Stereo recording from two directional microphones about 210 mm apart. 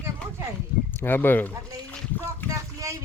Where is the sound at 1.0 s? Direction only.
10° left (ahead or behind).